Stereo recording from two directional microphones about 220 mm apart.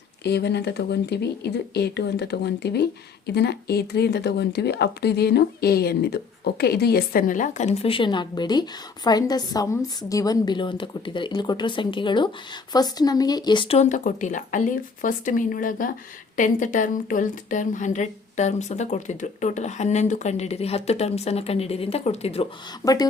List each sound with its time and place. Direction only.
0.3 s a woman's voice: 50° left (ahead or behind); by 22.4 s 30° left (ahead or behind)
22.8 s speech: 15° left (ahead or behind)